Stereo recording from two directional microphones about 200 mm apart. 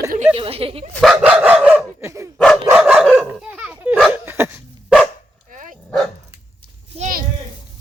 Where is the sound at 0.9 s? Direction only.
5° right (ahead or behind).